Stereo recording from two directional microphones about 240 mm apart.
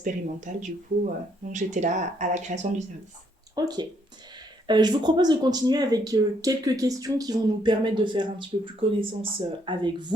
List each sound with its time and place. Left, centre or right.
0.0 s speech: right
3.5 s speech: centre